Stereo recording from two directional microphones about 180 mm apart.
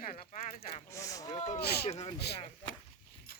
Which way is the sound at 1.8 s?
35° left (ahead or behind).